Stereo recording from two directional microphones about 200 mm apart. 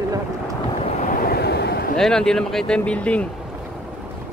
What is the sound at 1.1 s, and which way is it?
Vehicle, 45° left (ahead or behind).